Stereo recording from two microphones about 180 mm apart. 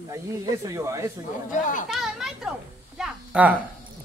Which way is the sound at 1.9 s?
Centre (ahead or behind).